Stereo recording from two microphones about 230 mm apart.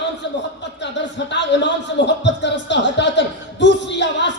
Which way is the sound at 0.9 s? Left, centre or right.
Left.